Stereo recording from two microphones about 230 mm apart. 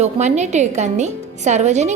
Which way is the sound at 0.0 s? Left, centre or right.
Right.